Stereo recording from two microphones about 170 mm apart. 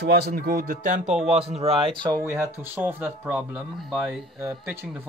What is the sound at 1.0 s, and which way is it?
Speech, 5° right (ahead or behind).